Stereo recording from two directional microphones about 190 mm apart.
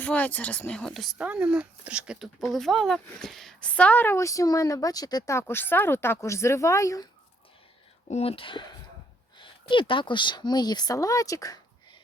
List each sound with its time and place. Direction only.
0.0 s speech: 10° left (ahead or behind)
8.0 s speech: 35° left (ahead or behind); by 11.6 s 20° left (ahead or behind)